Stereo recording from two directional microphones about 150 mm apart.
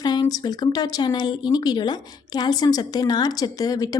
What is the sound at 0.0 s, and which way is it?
Speech, 25° left (ahead or behind).